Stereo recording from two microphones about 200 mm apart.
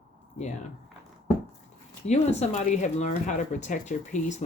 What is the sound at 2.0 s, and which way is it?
Speech, 35° left (ahead or behind).